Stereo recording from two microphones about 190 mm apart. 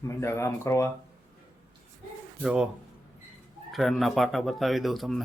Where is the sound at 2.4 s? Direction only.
5° right (ahead or behind).